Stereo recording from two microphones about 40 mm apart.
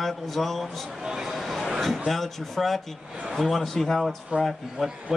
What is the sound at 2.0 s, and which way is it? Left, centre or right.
A man's voice, centre.